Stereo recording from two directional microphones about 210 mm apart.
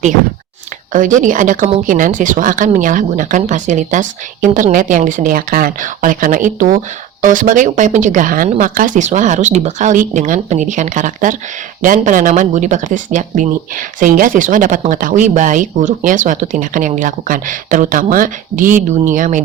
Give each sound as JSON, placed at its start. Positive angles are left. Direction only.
{"t": 0.9, "sound": "speech", "side_deg": -40}